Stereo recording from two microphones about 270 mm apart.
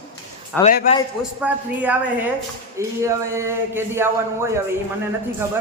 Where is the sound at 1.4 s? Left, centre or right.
Centre.